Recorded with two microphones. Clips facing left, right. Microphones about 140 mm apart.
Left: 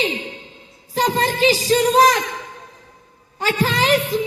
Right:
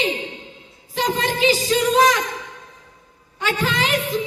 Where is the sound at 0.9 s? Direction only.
40° left (ahead or behind).